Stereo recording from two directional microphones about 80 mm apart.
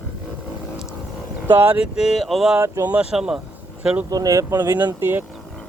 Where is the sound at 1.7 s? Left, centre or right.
Centre.